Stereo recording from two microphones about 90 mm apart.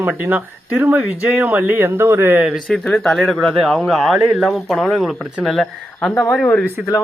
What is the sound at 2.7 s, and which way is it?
Speech, 5° left (ahead or behind).